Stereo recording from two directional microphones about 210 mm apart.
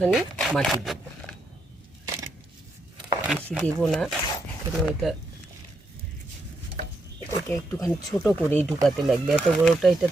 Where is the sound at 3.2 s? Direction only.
Centre (ahead or behind).